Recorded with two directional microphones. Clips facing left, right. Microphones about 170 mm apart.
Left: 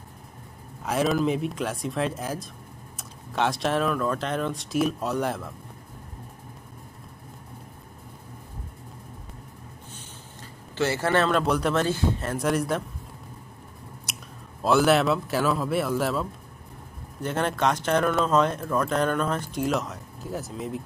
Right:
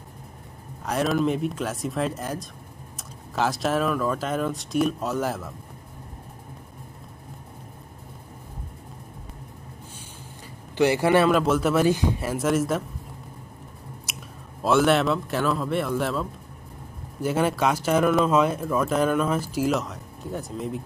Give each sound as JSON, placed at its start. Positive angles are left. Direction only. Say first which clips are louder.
{"t": 0.8, "sound": "speech", "louder": "even", "side_deg": 0}
{"t": 10.8, "sound": "speech", "louder": "right 4 dB", "side_deg": -15}
{"t": 14.1, "sound": "a sound", "louder": "even", "side_deg": -5}
{"t": 14.6, "sound": "speech", "louder": "even", "side_deg": 0}